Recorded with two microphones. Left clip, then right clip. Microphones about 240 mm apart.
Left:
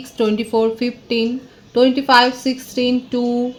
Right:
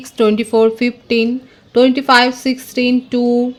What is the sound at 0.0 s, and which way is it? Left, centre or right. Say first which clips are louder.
Speech: right 5 dB; right.